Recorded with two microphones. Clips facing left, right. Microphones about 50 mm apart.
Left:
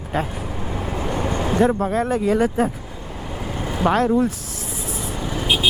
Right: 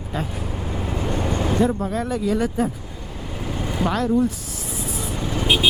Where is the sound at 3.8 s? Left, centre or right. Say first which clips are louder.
Left 5 dB; left.